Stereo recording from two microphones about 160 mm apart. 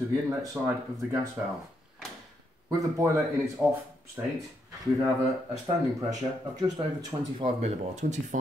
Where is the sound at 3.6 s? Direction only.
5° right (ahead or behind).